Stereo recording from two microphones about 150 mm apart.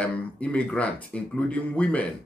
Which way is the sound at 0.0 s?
10° left (ahead or behind).